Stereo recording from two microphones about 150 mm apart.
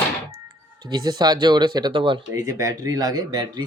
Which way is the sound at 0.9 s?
25° right (ahead or behind).